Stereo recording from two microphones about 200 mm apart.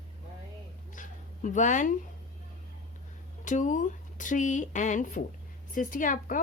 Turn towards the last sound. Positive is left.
turn(degrees=40)  # may be behind; listen again after turning